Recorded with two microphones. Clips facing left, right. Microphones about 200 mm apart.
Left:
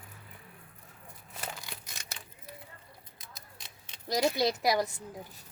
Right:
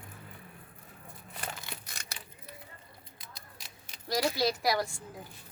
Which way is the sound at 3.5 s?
20° left (ahead or behind).